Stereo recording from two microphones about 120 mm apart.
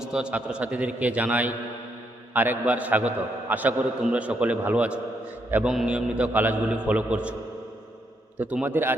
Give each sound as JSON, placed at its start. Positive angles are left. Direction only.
{"t": 0.1, "sound": "a man's voice", "side_deg": -10}
{"t": 8.4, "sound": "a man's voice", "side_deg": -10}